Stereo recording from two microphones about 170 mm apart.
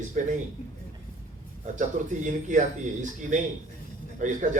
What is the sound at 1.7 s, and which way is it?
Speech, 45° right (ahead or behind).